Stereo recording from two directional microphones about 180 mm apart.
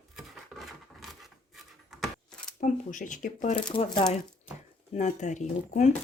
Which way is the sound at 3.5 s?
25° left (ahead or behind).